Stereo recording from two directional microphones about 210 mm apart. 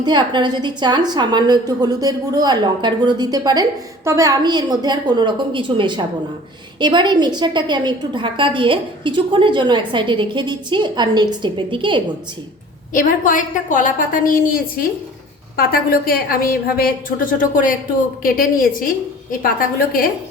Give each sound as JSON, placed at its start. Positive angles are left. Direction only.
{"t": 0.0, "sound": "a woman's voice", "side_deg": -20}
{"t": 12.9, "sound": "a woman's voice", "side_deg": 40}